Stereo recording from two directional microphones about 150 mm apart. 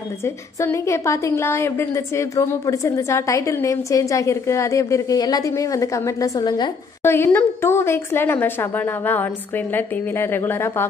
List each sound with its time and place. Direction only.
0.2 s a woman's voice: 20° left (ahead or behind)
7.0 s speech: 15° left (ahead or behind)